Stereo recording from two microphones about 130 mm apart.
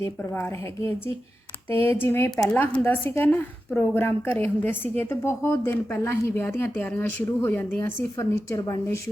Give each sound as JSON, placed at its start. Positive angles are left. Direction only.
{"t": 1.7, "sound": "a woman's voice", "side_deg": 15}